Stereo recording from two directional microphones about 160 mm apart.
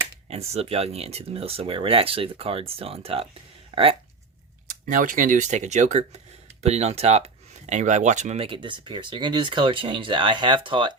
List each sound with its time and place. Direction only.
0.3 s speech: 40° right (ahead or behind)
4.9 s speech: 55° right (ahead or behind); by 10.9 s 30° right (ahead or behind)